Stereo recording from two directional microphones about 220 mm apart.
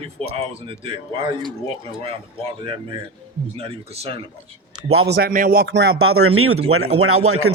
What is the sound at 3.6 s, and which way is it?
Speech, 25° right (ahead or behind).